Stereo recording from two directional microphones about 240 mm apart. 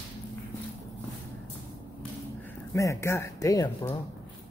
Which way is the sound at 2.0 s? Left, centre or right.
Centre.